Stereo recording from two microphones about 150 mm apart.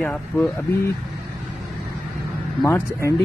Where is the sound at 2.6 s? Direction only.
20° left (ahead or behind).